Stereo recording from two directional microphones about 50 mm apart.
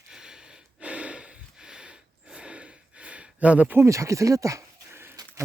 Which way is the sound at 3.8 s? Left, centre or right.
Right.